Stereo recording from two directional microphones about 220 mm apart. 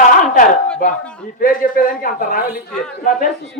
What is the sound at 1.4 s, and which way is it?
Speech, 40° left (ahead or behind).